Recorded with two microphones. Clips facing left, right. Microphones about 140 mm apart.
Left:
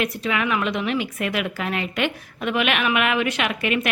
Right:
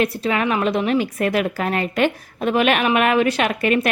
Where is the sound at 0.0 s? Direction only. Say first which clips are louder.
Right 4 dB; 35° right (ahead or behind).